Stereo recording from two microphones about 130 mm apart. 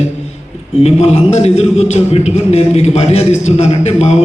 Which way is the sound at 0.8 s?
50° left (ahead or behind).